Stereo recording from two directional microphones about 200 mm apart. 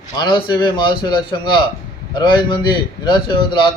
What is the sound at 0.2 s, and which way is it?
Speech, 20° left (ahead or behind).